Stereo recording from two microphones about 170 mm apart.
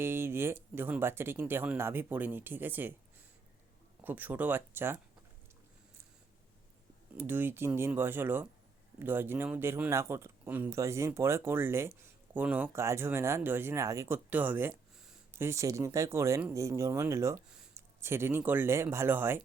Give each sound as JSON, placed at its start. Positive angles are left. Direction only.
{"t": 0.0, "sound": "speech", "side_deg": -15}
{"t": 4.0, "sound": "speech", "side_deg": -10}
{"t": 7.2, "sound": "speech", "side_deg": -10}